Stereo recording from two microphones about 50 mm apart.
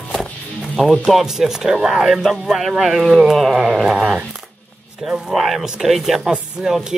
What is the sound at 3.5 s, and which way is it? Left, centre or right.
Speech, centre.